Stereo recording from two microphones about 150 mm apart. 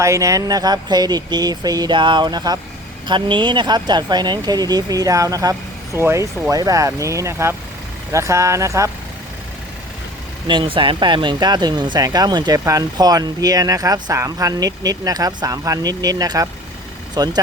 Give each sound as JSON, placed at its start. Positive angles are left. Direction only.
{"t": 0.0, "sound": "speech", "side_deg": -20}
{"t": 10.4, "sound": "speech", "side_deg": -35}